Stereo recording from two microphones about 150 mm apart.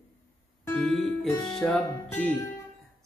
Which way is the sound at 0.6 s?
10° left (ahead or behind).